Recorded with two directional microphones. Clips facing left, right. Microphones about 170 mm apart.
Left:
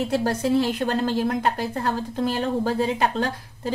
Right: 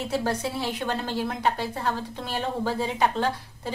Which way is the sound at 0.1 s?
45° left (ahead or behind).